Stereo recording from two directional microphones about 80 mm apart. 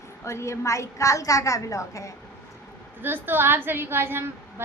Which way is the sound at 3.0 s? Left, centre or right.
Right.